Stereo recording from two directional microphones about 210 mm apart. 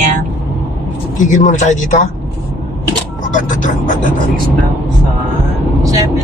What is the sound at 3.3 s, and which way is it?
Speech, 40° left (ahead or behind).